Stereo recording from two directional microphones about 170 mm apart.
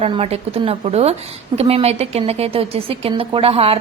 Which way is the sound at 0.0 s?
35° right (ahead or behind).